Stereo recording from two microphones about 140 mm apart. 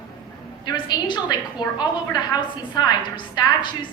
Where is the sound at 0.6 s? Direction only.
30° left (ahead or behind).